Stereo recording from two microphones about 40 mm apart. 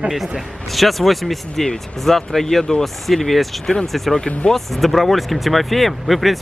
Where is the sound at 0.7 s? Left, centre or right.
Centre.